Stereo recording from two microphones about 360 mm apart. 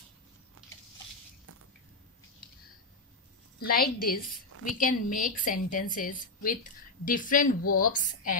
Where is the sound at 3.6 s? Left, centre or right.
Left.